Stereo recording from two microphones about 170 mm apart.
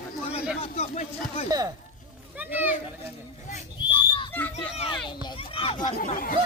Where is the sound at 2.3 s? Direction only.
10° right (ahead or behind).